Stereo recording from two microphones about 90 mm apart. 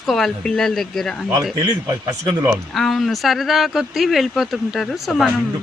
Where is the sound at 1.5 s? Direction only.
45° right (ahead or behind).